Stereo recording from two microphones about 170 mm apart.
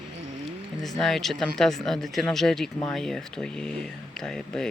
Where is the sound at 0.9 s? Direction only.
Centre (ahead or behind).